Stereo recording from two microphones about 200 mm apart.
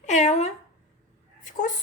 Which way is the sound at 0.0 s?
35° left (ahead or behind).